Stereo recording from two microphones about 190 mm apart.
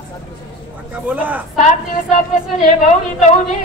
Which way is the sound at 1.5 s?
40° left (ahead or behind).